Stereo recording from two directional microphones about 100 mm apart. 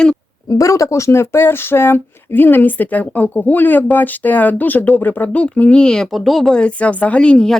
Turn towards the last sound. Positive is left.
turn(degrees=10)  # may be behind; listen again after turning